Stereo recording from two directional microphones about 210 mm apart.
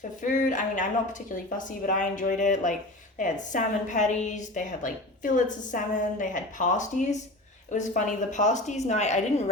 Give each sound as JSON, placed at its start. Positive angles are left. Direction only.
{"t": 0.3, "sound": "a woman's voice", "side_deg": 35}